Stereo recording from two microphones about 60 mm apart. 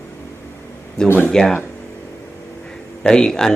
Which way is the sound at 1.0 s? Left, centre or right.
Left.